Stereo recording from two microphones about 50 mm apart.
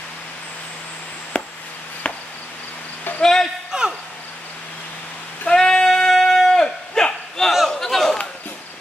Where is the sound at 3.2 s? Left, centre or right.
Centre.